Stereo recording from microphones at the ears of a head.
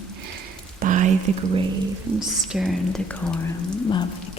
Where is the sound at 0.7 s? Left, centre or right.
Right.